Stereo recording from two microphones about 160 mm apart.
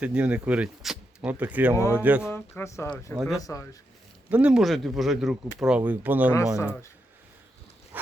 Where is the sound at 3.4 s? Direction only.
20° left (ahead or behind).